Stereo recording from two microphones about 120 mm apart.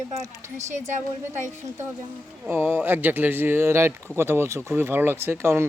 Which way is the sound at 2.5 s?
20° right (ahead or behind).